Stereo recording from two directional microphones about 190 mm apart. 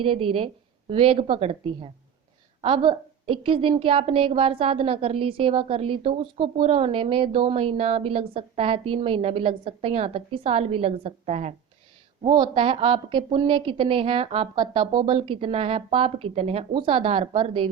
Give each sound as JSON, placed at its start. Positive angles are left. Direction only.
{"t": 0.0, "sound": "a woman's voice", "side_deg": -30}